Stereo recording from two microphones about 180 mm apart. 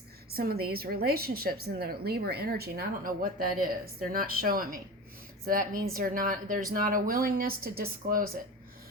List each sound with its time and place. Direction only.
0.3 s a woman's voice: 60° right (ahead or behind)